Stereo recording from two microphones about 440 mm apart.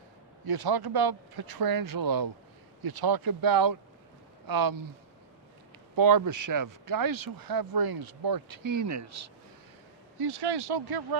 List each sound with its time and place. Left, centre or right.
0.4 s speech: right
6.0 s speech: right
10.2 s speech: right